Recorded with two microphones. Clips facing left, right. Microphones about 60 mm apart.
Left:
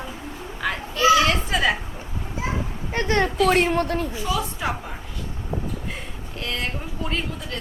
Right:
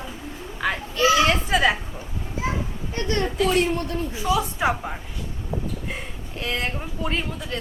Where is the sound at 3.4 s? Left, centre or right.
Left.